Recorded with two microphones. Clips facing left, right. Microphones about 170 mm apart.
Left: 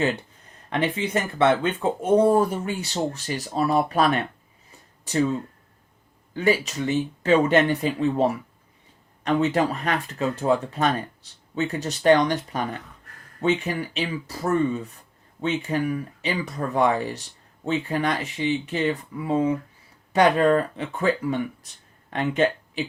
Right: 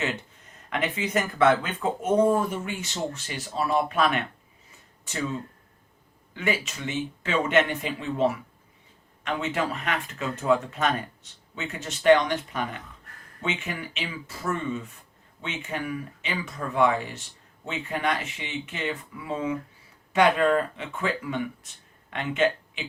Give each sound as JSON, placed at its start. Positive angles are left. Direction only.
{"t": 0.7, "sound": "speech", "side_deg": 30}
{"t": 6.3, "sound": "speech", "side_deg": 35}